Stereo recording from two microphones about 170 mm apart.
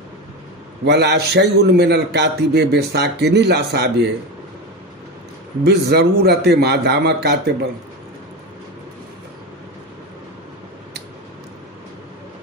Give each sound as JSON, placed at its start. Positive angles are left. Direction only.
{"t": 0.8, "sound": "a man's voice", "side_deg": -80}
{"t": 5.6, "sound": "a man's voice", "side_deg": -75}